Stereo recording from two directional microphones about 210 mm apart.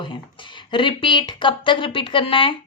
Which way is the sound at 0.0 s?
20° left (ahead or behind).